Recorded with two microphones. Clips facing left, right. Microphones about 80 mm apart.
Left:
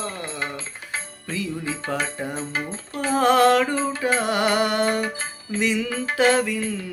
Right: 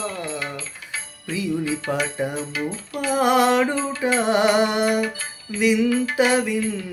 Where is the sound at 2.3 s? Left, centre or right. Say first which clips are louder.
Right 2 dB; left.